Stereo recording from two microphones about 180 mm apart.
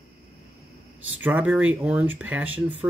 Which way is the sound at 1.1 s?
10° right (ahead or behind).